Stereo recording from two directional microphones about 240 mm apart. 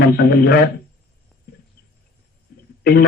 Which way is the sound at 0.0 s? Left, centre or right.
Left.